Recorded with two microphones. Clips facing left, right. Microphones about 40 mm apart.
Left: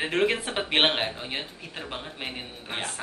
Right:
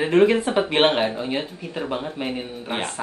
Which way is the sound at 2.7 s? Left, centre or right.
Centre.